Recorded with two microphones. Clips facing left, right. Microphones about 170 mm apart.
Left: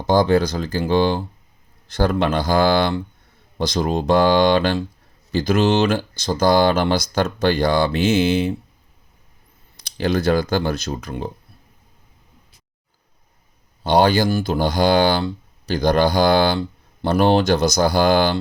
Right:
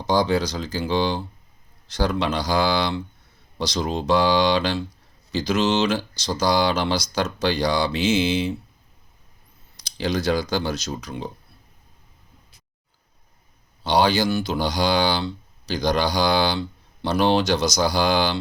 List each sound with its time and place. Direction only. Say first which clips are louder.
0.1 s speech: left 5 dB; 55° left (ahead or behind)
9.8 s speech: left 4 dB; 55° left (ahead or behind)
13.8 s speech: left 4 dB; 55° left (ahead or behind)